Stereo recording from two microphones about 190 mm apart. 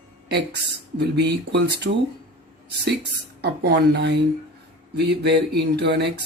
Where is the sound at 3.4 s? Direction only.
60° right (ahead or behind).